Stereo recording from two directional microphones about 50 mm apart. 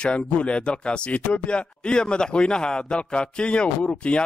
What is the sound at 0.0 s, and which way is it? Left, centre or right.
Speech, left.